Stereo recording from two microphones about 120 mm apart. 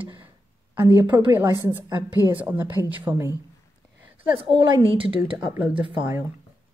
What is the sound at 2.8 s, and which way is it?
Speech, 15° right (ahead or behind).